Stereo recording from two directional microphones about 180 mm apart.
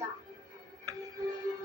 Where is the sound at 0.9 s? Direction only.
20° right (ahead or behind).